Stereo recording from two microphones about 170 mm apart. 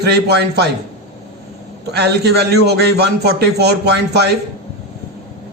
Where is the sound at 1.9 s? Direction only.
75° right (ahead or behind).